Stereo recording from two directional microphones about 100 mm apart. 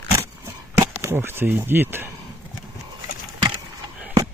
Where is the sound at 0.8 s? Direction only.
25° right (ahead or behind).